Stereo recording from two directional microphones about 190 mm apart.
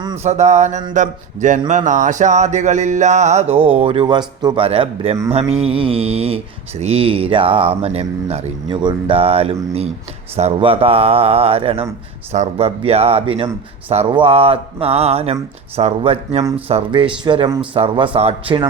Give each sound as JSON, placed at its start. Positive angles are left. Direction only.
{"t": 0.2, "sound": "speech", "side_deg": -35}
{"t": 16.4, "sound": "speech", "side_deg": -20}
{"t": 16.6, "sound": "speech", "side_deg": -30}